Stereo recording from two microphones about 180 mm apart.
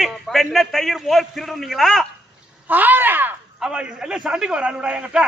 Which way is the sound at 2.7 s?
10° right (ahead or behind).